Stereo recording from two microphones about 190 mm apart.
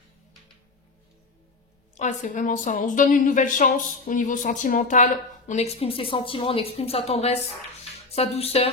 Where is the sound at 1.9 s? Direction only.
40° left (ahead or behind).